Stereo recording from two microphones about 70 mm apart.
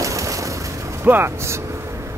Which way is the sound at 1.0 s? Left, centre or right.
Right.